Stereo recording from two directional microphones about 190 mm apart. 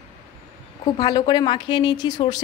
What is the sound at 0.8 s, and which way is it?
A woman's voice, 20° left (ahead or behind).